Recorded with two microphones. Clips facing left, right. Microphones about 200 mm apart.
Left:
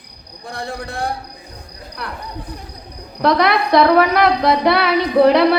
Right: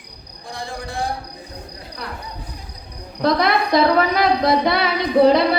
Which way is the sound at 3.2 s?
65° left (ahead or behind).